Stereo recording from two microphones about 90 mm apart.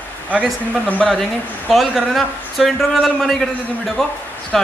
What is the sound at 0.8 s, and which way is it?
A man's voice, 10° left (ahead or behind).